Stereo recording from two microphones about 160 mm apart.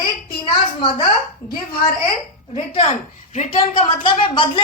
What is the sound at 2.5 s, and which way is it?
A woman's voice, 35° left (ahead or behind).